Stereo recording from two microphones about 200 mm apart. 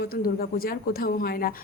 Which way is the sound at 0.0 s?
50° left (ahead or behind).